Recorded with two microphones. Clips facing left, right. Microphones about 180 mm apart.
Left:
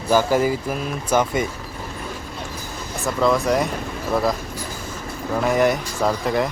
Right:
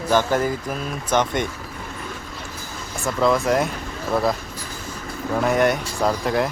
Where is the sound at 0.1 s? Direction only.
10° left (ahead or behind).